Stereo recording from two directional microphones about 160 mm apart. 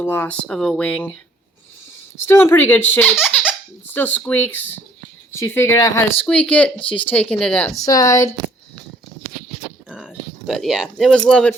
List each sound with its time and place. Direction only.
0.0 s speech: 15° left (ahead or behind)
2.1 s speech: 15° left (ahead or behind)
3.1 s speech: centre (ahead or behind)
3.8 s speech: 10° left (ahead or behind)
6.2 s speech: 5° left (ahead or behind)
6.8 s speech: 35° left (ahead or behind)
7.1 s speech: 10° left (ahead or behind)
7.9 s speech: 20° left (ahead or behind)
9.2 s a sound: centre (ahead or behind)